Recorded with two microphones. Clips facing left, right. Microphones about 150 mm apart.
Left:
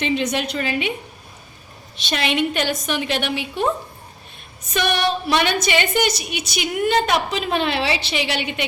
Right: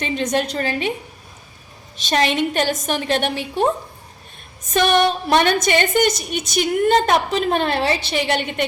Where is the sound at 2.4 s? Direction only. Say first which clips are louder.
Right 1 dB; 45° right (ahead or behind).